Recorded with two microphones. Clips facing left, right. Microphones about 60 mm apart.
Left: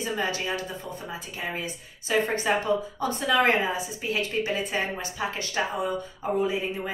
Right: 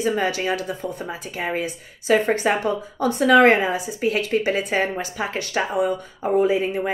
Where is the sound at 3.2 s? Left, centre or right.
Right.